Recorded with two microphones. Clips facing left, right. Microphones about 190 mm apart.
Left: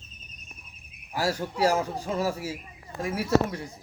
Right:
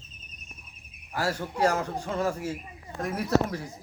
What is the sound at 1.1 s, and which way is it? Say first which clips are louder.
Speech: left 1 dB; 10° left (ahead or behind).